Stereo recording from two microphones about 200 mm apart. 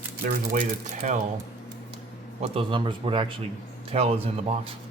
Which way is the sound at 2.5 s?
25° right (ahead or behind).